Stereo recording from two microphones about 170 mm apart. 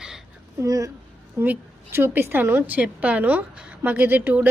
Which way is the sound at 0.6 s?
20° right (ahead or behind).